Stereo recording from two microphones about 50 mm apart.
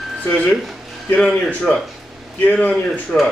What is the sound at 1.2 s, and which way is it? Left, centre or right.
Speech, centre.